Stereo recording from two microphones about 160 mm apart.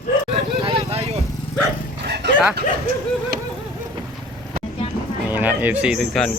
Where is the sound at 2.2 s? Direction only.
90° right.